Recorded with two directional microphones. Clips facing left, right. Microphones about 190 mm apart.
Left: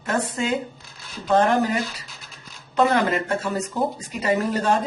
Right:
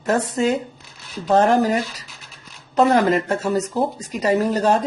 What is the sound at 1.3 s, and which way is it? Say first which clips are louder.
Speech: right 3 dB; 40° right (ahead or behind).